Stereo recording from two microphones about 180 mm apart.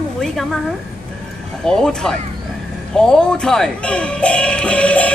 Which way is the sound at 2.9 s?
5° left (ahead or behind).